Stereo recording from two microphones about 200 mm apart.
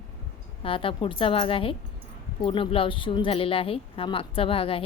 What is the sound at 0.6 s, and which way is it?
A woman's voice, 25° left (ahead or behind).